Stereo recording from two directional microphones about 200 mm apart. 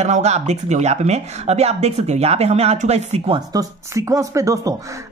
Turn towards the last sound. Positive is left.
turn(degrees=-15)  # may be behind; listen again after turning